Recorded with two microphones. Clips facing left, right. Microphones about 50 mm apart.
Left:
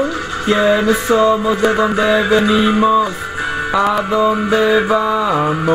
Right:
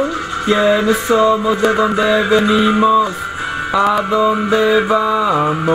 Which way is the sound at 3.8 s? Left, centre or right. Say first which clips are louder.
Right 1 dB; centre.